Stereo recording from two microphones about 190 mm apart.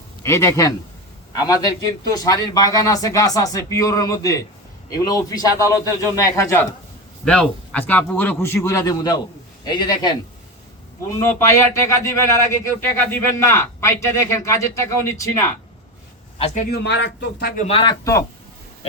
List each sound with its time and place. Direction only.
0.3 s a man's voice: 15° left (ahead or behind)
16.4 s a man's voice: 35° left (ahead or behind)
16.8 s speech: 65° left (ahead or behind)
17.6 s a man's voice: 30° left (ahead or behind)
18.0 s a man's voice: 15° left (ahead or behind)